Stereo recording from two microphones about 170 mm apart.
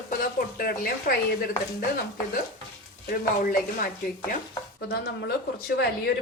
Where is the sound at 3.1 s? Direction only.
55° left (ahead or behind).